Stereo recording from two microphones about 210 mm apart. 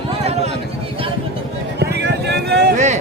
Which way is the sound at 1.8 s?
55° right (ahead or behind).